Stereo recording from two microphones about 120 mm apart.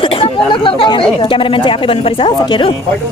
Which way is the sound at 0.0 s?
45° left (ahead or behind).